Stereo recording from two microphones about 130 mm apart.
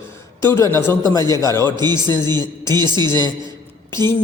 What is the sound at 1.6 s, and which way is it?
A man's voice, 30° right (ahead or behind).